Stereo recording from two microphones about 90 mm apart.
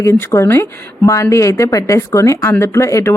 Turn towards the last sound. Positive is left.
turn(degrees=35)  # may be behind; listen again after turning